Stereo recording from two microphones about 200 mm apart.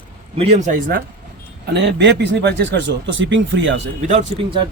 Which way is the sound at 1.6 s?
60° right (ahead or behind).